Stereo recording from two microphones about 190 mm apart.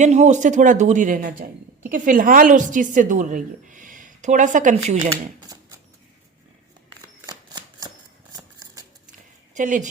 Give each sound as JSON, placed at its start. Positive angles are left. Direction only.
{"t": 0.0, "sound": "a man's voice", "side_deg": -40}
{"t": 7.2, "sound": "shuffling cards", "side_deg": -20}
{"t": 8.4, "sound": "scissors", "side_deg": -20}
{"t": 9.6, "sound": "a man's voice", "side_deg": -40}